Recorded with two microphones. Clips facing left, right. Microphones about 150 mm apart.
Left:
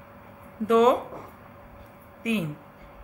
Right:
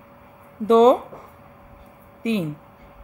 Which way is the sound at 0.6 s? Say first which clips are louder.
Right 5 dB; 30° right (ahead or behind).